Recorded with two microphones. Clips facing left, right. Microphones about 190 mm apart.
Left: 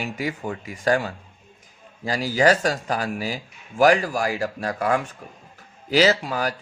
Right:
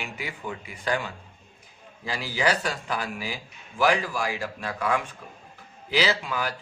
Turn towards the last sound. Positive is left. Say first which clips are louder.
# left 5 dB
turn(degrees=40)  # may be behind; listen again after turning